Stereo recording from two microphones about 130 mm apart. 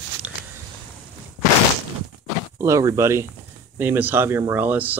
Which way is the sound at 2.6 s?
25° right (ahead or behind).